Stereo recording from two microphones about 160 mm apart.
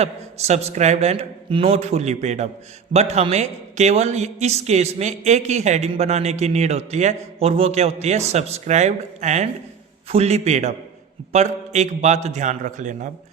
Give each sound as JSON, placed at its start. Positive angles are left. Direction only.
{"t": 0.0, "sound": "a man's voice", "side_deg": -40}